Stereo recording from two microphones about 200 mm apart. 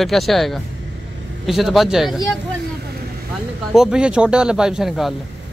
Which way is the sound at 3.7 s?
5° right (ahead or behind).